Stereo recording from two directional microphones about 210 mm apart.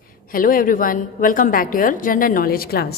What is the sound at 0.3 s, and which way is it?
A woman's voice, 40° left (ahead or behind).